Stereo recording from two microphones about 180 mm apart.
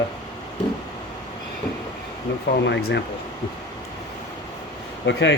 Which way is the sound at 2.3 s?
90° left.